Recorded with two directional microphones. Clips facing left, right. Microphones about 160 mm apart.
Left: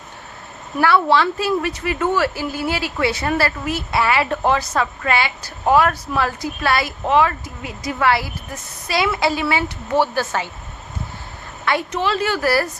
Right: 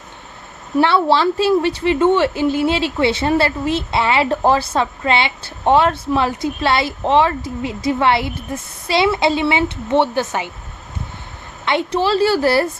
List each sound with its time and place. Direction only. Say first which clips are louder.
0.8 s a woman's voice: right 2 dB; 30° right (ahead or behind)
11.6 s a woman's voice: right 3 dB; 25° right (ahead or behind)